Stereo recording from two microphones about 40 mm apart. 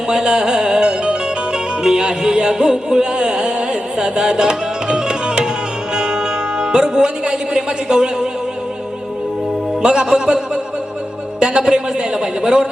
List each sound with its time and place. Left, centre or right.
0.1 s music: centre
9.8 s a man's voice: centre